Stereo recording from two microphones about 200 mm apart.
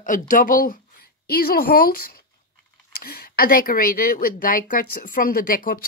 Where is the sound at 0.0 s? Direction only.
40° left (ahead or behind).